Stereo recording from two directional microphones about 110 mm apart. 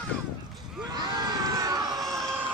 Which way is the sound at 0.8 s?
35° right (ahead or behind).